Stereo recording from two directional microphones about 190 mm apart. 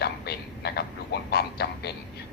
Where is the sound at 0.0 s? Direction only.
60° left (ahead or behind).